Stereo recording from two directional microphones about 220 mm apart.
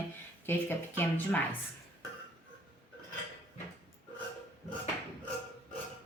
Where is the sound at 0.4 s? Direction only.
10° left (ahead or behind).